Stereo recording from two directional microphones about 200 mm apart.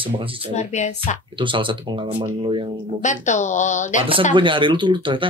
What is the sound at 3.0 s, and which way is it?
Speech, 35° left (ahead or behind).